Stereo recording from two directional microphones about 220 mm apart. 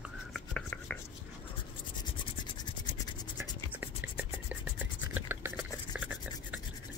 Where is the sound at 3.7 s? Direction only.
10° right (ahead or behind).